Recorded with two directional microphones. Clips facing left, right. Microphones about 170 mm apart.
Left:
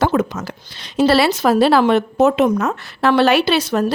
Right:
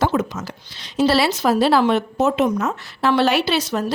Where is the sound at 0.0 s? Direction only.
60° left (ahead or behind).